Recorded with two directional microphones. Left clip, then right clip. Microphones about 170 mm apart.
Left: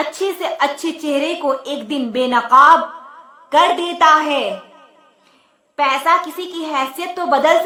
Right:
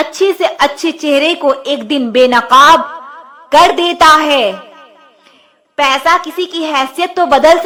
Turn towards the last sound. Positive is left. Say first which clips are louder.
# right 7 dB
turn(degrees=-30)  # may be behind; listen again after turning